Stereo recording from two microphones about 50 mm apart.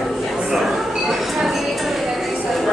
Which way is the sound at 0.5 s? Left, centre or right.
Centre.